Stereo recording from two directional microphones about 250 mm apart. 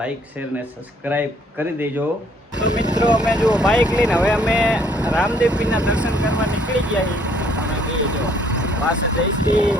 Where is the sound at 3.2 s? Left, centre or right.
Centre.